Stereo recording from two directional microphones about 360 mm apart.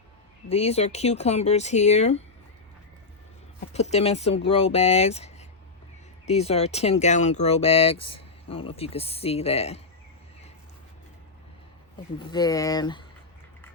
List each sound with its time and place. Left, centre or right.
0.4 s speech: centre
3.7 s speech: centre
12.2 s speech: centre